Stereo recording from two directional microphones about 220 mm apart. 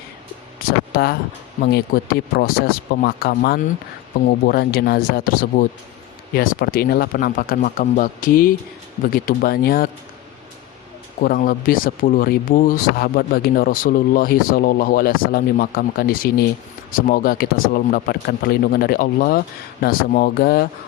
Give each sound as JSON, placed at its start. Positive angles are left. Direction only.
{"t": 0.9, "sound": "speech", "side_deg": 45}
{"t": 11.2, "sound": "speech", "side_deg": 40}